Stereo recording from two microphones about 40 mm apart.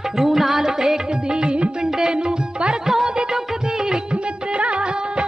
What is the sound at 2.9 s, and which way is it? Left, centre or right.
Music, centre.